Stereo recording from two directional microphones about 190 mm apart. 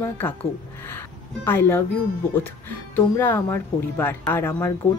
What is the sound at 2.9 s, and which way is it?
Speech, 10° left (ahead or behind).